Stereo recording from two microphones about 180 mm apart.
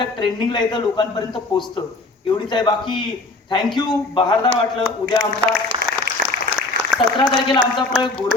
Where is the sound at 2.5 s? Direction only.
25° left (ahead or behind).